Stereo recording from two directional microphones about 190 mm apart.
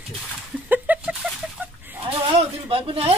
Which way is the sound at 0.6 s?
10° right (ahead or behind).